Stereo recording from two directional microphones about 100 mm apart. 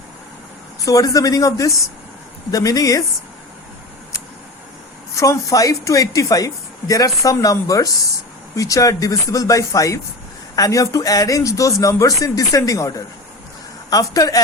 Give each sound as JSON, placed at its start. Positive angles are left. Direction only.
{"t": 0.9, "sound": "speech", "side_deg": 35}
{"t": 5.1, "sound": "speech", "side_deg": 35}
{"t": 13.9, "sound": "speech", "side_deg": 35}